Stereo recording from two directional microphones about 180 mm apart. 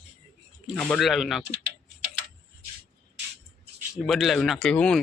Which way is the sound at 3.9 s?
Centre (ahead or behind).